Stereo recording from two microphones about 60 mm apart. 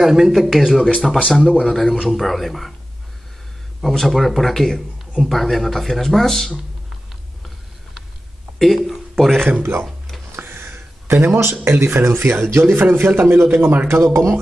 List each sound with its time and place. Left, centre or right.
0.0 s speech: centre
3.8 s speech: centre
8.5 s speech: centre
9.4 s speech: right
10.3 s a sound: right
11.6 s speech: right